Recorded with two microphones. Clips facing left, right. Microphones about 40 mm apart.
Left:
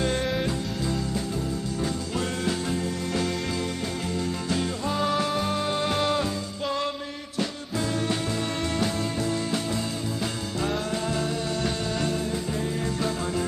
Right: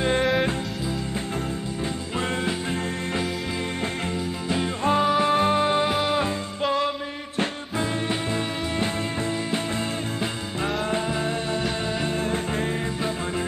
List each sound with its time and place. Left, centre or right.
0.0 s music: right
2.1 s music: right
5.0 s music: centre
5.3 s music: right
5.9 s music: centre
6.2 s music: right